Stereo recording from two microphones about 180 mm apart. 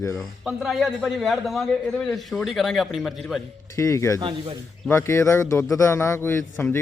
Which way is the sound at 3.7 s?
15° left (ahead or behind).